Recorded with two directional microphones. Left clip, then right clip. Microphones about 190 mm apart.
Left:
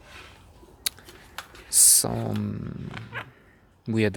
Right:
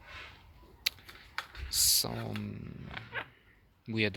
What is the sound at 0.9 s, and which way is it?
Typing, 35° left (ahead or behind).